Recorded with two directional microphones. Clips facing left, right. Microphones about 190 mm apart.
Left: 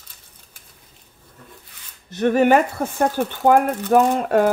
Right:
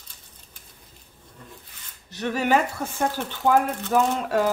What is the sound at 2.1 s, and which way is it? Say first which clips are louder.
Speech: left 7 dB; 50° left (ahead or behind).